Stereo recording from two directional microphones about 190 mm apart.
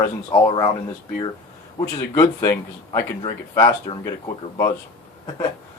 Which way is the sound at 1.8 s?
15° left (ahead or behind).